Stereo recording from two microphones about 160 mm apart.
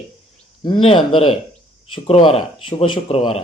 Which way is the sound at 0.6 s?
35° left (ahead or behind).